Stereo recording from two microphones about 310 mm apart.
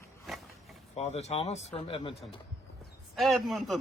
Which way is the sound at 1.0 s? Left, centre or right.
Left.